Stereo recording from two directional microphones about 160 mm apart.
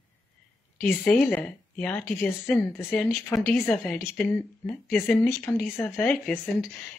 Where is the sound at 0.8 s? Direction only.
Centre (ahead or behind).